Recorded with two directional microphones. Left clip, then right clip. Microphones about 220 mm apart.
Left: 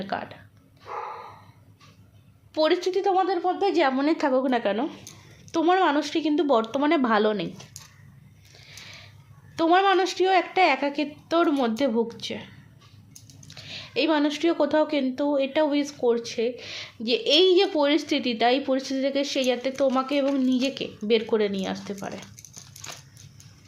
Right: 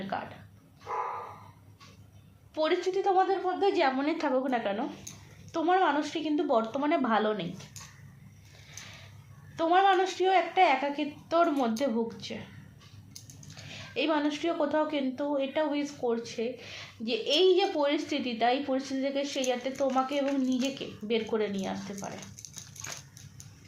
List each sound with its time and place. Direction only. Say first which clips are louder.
0.1 s speech: left 4 dB; 50° left (ahead or behind)
2.6 s speech: left 6 dB; 50° left (ahead or behind)
9.6 s speech: left 4 dB; 50° left (ahead or behind)
13.5 s speech: left 7 dB; 45° left (ahead or behind)